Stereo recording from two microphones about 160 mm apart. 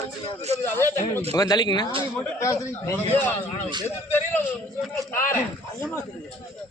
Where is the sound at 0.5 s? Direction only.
15° left (ahead or behind).